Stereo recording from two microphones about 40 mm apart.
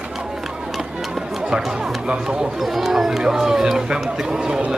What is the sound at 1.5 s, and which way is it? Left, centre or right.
Music, right.